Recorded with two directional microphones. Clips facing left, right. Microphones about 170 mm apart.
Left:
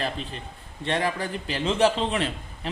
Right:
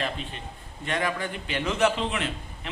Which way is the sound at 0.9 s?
30° left (ahead or behind).